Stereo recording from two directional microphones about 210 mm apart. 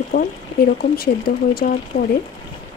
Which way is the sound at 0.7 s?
45° left (ahead or behind).